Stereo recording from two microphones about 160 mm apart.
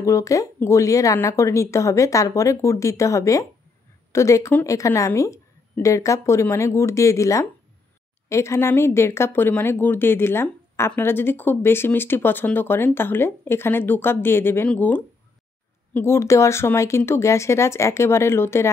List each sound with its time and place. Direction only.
0.0 s speech: 20° left (ahead or behind)